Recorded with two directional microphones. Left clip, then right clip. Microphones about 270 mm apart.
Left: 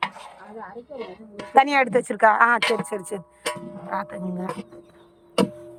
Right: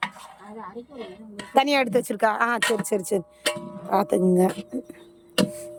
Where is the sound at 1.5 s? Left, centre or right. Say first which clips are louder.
Left 3 dB; right.